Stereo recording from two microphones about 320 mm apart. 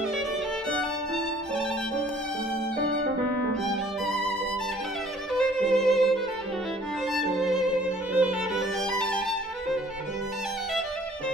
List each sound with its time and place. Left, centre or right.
5.4 s violin: centre